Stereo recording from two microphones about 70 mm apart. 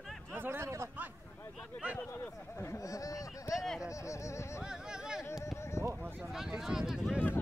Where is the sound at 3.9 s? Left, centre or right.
Left.